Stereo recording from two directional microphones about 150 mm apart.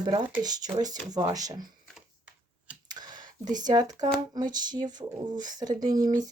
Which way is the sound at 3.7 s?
25° right (ahead or behind).